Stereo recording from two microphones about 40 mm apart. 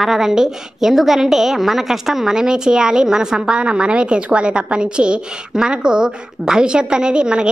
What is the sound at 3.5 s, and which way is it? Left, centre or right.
A woman's voice, right.